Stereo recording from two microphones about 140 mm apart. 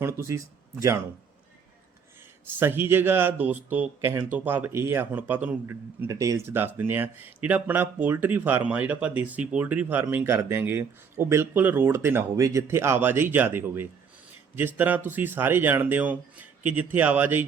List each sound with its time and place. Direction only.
0.0 s speech: 20° right (ahead or behind)
2.6 s speech: 15° right (ahead or behind)
6.1 s speech: 25° right (ahead or behind)